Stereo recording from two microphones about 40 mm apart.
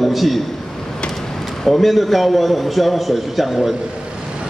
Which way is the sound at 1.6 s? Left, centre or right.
Centre.